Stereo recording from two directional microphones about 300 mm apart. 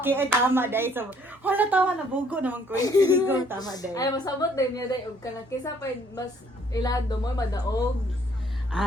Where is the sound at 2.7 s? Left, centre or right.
Centre.